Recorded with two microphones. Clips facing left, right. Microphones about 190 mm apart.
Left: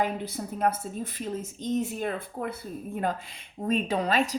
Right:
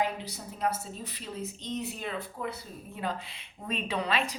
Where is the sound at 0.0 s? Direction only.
50° left (ahead or behind).